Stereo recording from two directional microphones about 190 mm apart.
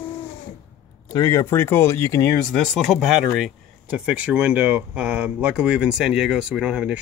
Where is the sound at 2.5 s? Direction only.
Centre (ahead or behind).